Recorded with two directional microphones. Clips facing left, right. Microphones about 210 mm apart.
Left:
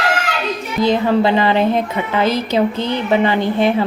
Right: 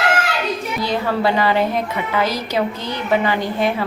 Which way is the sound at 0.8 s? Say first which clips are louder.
Left 6 dB; 25° left (ahead or behind).